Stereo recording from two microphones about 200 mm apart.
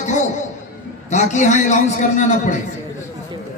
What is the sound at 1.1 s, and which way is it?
Mantra, 35° left (ahead or behind).